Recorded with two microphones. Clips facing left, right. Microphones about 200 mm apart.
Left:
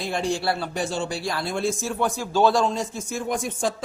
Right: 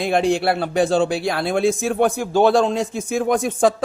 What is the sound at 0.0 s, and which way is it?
Speech, 60° right (ahead or behind).